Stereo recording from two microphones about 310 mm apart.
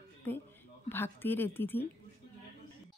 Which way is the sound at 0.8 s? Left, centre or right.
Centre.